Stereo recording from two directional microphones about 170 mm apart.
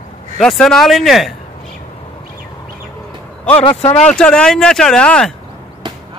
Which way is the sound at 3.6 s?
35° left (ahead or behind).